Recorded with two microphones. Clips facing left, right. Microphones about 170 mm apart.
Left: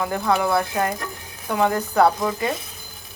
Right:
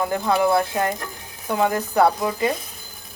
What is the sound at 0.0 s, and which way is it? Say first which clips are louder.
Speech: right 1 dB; 20° right (ahead or behind).